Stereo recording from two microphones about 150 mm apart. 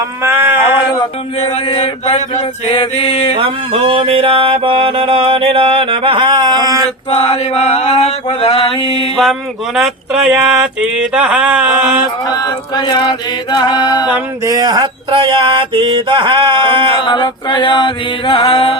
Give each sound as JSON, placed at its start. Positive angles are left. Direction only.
{"t": 0.2, "sound": "speech", "side_deg": -15}
{"t": 1.4, "sound": "male singing", "side_deg": 45}
{"t": 1.6, "sound": "chant", "side_deg": 40}
{"t": 3.4, "sound": "mantra", "side_deg": -35}
{"t": 7.1, "sound": "male singing", "side_deg": 45}
{"t": 8.4, "sound": "chant", "side_deg": 40}
{"t": 9.7, "sound": "a sound", "side_deg": -5}
{"t": 12.2, "sound": "a sound", "side_deg": 25}
{"t": 14.4, "sound": "mantra", "side_deg": -25}
{"t": 17.0, "sound": "chant", "side_deg": 30}